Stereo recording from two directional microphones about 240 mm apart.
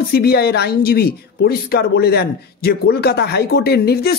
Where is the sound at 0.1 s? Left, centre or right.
Left.